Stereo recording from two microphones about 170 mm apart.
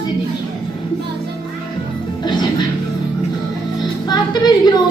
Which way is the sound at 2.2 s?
25° left (ahead or behind).